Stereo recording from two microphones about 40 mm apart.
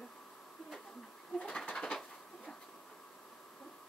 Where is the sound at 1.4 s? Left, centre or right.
Left.